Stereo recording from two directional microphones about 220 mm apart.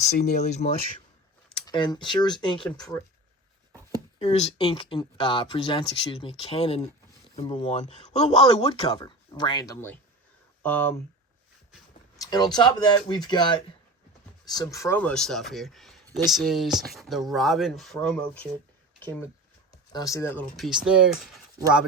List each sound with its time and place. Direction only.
0.0 s speech: 30° left (ahead or behind)
1.5 s speech: 20° left (ahead or behind)
4.2 s speech: 30° left (ahead or behind); by 10.9 s 10° left (ahead or behind)
12.2 s speech: 20° left (ahead or behind)
20.6 s speech: 5° right (ahead or behind)